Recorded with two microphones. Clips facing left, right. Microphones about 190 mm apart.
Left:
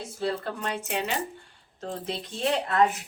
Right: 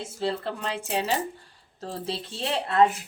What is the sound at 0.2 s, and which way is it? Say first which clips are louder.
A woman's voice: right 1 dB; 30° right (ahead or behind).